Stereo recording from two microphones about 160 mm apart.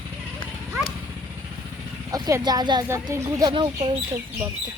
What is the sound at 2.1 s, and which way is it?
Speech, 20° right (ahead or behind).